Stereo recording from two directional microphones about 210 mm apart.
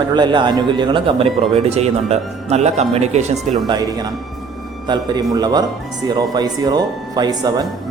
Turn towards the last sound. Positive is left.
turn(degrees=-20)  # may be behind; listen again after turning